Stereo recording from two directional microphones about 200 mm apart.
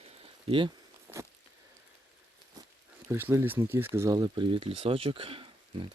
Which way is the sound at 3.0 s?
10° right (ahead or behind).